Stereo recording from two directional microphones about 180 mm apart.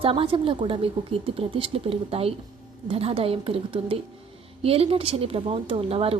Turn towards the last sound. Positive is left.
turn(degrees=-30)  # may be behind; listen again after turning